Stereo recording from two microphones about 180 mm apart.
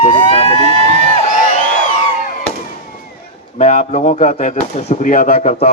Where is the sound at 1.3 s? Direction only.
45° left (ahead or behind).